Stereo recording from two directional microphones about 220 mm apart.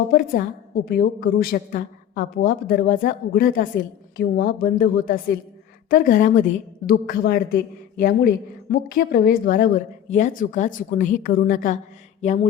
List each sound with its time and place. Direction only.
0.1 s a woman's voice: 40° left (ahead or behind)